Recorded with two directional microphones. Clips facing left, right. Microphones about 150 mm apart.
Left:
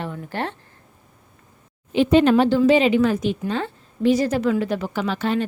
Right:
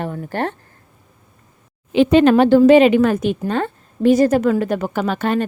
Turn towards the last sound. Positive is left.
turn(degrees=-50)  # may be behind; listen again after turning